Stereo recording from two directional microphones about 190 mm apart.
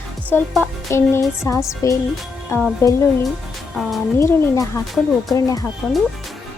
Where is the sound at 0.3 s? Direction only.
10° left (ahead or behind).